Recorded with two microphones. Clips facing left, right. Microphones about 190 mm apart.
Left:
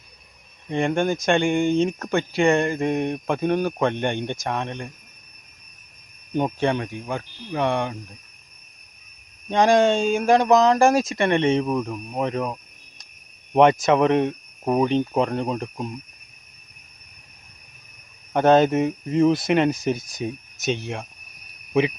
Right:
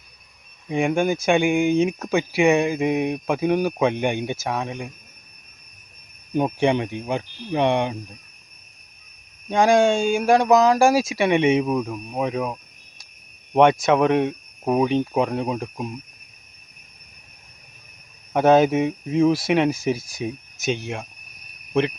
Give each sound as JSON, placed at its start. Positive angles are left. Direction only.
{"t": 0.7, "sound": "speech", "side_deg": -5}
{"t": 6.3, "sound": "speech", "side_deg": -10}
{"t": 9.5, "sound": "speech", "side_deg": -5}
{"t": 18.3, "sound": "speech", "side_deg": -5}